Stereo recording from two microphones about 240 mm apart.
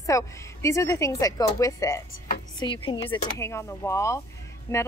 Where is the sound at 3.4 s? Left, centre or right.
Centre.